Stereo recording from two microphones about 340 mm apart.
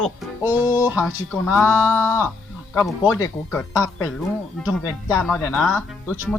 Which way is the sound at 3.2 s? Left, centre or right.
Centre.